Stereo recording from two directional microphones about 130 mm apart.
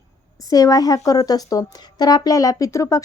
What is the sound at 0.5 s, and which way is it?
A woman's voice, 30° left (ahead or behind).